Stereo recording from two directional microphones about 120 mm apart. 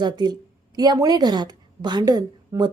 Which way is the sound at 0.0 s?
35° right (ahead or behind).